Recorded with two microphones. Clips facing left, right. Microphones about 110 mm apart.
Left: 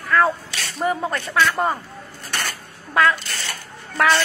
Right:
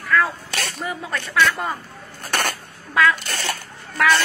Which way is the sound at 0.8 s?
40° left (ahead or behind).